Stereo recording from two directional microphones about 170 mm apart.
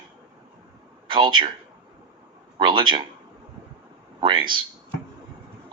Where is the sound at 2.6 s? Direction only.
30° right (ahead or behind).